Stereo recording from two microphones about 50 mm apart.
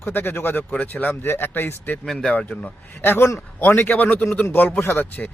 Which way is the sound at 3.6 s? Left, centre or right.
Left.